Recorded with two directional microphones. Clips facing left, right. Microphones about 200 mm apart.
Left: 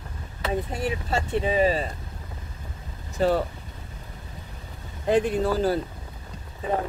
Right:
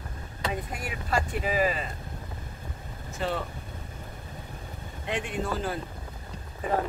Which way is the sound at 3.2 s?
40° left (ahead or behind).